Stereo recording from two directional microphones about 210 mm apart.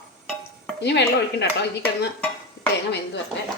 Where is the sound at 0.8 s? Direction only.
55° left (ahead or behind).